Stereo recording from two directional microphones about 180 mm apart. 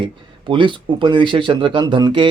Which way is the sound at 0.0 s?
30° right (ahead or behind).